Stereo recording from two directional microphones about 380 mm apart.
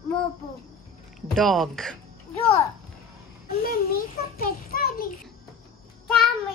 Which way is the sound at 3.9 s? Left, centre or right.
Left.